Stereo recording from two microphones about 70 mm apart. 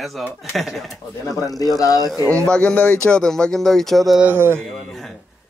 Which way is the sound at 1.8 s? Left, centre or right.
Left.